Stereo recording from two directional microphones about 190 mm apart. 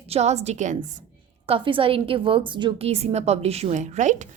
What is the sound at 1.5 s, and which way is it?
A woman's voice, 25° right (ahead or behind).